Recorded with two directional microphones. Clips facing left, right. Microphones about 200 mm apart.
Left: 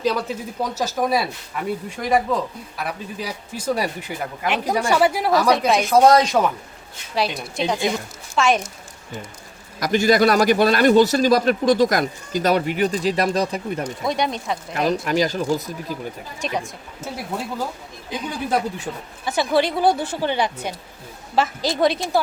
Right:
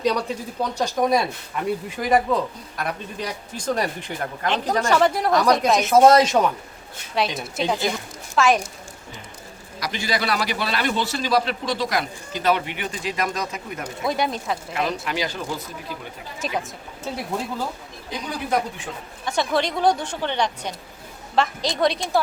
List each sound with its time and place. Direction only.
0.0 s speech: 5° left (ahead or behind)
9.8 s a man's voice: 50° left (ahead or behind)
14.0 s speech: 5° right (ahead or behind)
14.7 s a man's voice: 45° left (ahead or behind)
16.4 s speech: 5° right (ahead or behind)
19.2 s a woman's voice: 5° left (ahead or behind)